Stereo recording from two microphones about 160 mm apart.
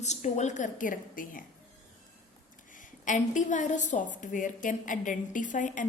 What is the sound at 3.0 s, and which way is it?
A woman's voice, 50° left (ahead or behind).